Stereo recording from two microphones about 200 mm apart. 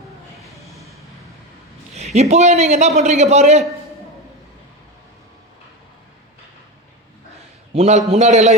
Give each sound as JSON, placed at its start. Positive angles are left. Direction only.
{"t": 0.4, "sound": "a sound", "side_deg": 0}
{"t": 2.1, "sound": "a man's voice", "side_deg": -35}
{"t": 7.7, "sound": "a man's voice", "side_deg": -35}